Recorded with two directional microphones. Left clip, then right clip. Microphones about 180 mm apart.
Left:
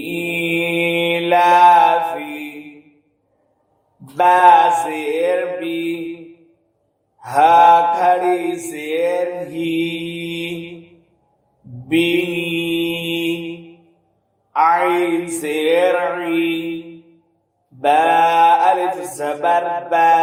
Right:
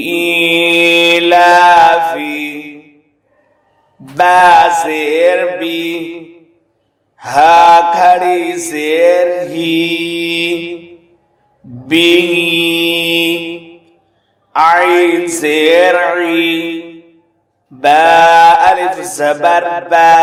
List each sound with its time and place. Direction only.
0.1 s mantra: 40° right (ahead or behind)
4.1 s mantra: 35° right (ahead or behind)
11.9 s mantra: 35° right (ahead or behind)
14.5 s a sound: 35° right (ahead or behind)